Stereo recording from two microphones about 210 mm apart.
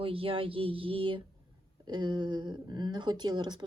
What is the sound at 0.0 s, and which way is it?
A woman's voice, 25° right (ahead or behind).